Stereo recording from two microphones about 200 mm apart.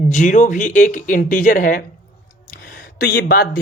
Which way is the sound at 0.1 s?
40° left (ahead or behind).